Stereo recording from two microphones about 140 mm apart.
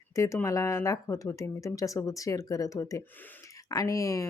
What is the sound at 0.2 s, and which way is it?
A woman's voice, 20° left (ahead or behind).